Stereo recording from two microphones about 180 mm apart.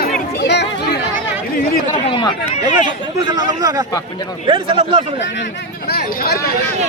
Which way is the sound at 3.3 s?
20° right (ahead or behind).